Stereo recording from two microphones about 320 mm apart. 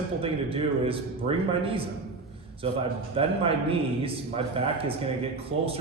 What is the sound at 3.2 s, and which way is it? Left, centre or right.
A man's voice, centre.